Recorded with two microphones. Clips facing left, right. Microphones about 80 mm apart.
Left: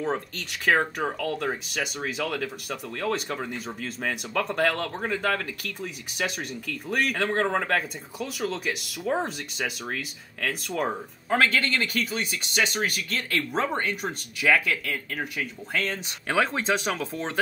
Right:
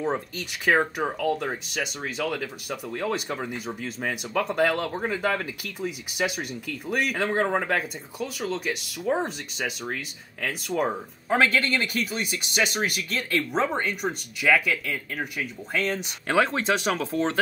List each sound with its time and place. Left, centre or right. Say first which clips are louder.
0.0 s speech: right 1 dB; centre